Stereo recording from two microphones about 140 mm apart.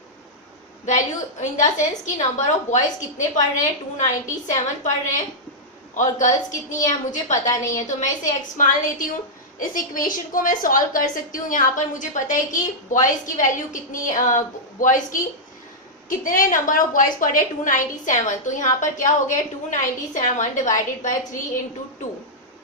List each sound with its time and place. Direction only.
0.9 s a woman's voice: 60° left (ahead or behind)
7.4 s a woman's voice: 20° left (ahead or behind)
7.8 s a woman's voice: 65° left (ahead or behind)